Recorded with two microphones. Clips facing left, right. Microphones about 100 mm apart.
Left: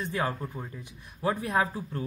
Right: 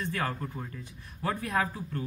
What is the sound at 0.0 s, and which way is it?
Speech, 20° left (ahead or behind).